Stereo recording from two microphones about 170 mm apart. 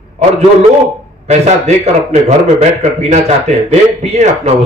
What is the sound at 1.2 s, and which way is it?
Speech, 40° right (ahead or behind).